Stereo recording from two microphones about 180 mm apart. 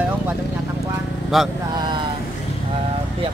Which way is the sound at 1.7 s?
25° right (ahead or behind).